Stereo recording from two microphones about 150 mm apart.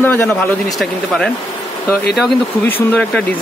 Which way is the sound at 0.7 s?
5° left (ahead or behind).